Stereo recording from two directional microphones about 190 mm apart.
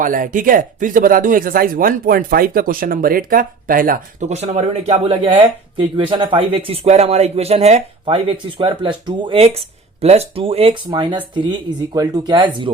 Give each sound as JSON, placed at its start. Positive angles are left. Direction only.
{"t": 0.0, "sound": "speech", "side_deg": -45}